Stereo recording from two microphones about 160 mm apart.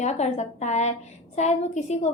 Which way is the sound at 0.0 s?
45° left (ahead or behind).